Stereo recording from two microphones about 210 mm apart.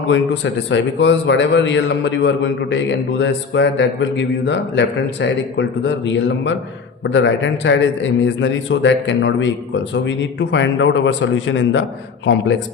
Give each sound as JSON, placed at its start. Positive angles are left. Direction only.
{"t": 0.1, "sound": "a man's voice", "side_deg": 60}